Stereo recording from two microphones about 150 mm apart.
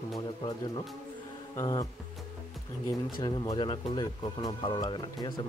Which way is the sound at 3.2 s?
25° left (ahead or behind).